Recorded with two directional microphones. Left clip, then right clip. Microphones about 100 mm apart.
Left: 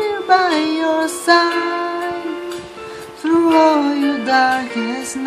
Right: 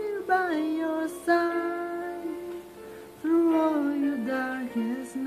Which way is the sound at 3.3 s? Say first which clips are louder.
Left 11 dB; 10° left (ahead or behind).